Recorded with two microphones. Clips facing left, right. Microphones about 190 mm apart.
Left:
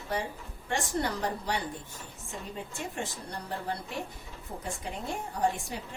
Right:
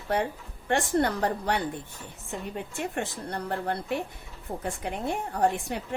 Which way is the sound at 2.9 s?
60° right (ahead or behind).